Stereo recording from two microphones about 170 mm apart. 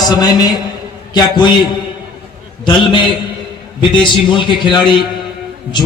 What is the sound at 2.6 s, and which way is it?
A man's voice, 30° left (ahead or behind).